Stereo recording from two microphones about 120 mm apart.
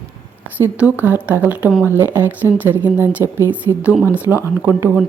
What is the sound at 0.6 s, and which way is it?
Speech, 15° right (ahead or behind).